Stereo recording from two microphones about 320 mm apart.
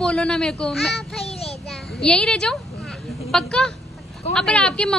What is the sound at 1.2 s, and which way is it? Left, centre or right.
Child singing, centre.